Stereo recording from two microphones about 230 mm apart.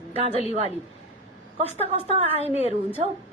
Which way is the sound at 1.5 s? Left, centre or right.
Right.